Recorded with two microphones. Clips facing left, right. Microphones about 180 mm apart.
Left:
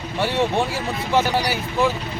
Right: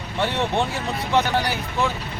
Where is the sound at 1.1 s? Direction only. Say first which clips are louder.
Left 1 dB; 10° left (ahead or behind).